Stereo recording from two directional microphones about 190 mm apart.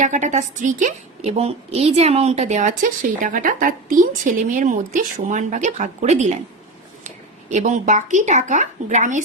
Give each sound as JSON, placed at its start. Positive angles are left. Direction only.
{"t": 0.0, "sound": "a woman's voice", "side_deg": -40}
{"t": 7.5, "sound": "a woman's voice", "side_deg": -40}